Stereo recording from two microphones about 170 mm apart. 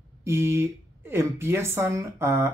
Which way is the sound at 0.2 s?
15° right (ahead or behind).